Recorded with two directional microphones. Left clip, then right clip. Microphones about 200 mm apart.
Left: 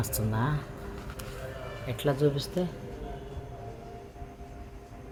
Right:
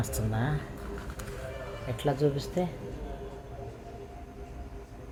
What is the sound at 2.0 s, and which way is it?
Speech, 20° left (ahead or behind).